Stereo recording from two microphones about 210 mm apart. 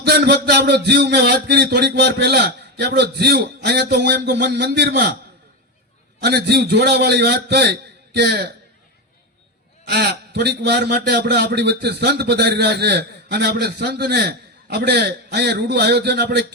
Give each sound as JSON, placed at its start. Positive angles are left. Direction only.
{"t": 0.0, "sound": "a man's voice", "side_deg": -50}
{"t": 6.1, "sound": "a man's voice", "side_deg": -50}
{"t": 9.8, "sound": "a man's voice", "side_deg": -50}